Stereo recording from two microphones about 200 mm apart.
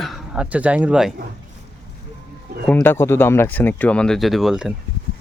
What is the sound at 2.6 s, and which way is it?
Speech, 10° left (ahead or behind).